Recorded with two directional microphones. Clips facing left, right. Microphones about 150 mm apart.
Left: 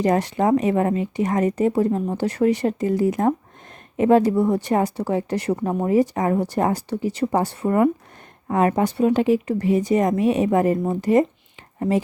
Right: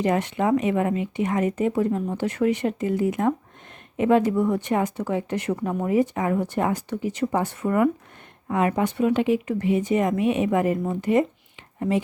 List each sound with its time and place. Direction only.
0.0 s speech: 35° left (ahead or behind)